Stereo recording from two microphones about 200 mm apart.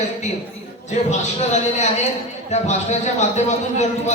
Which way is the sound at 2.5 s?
35° left (ahead or behind).